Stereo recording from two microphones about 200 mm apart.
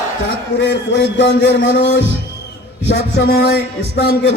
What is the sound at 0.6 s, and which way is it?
A man's voice, 60° left (ahead or behind).